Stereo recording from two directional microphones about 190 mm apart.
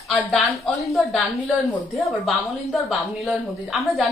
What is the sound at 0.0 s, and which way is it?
A woman's voice, centre (ahead or behind).